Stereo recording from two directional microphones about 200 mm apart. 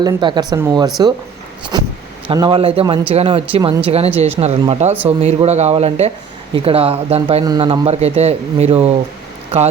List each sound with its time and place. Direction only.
0.0 s a man's voice: 20° right (ahead or behind)